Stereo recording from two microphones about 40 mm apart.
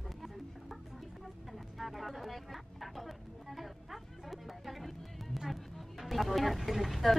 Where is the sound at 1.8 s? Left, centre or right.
Centre.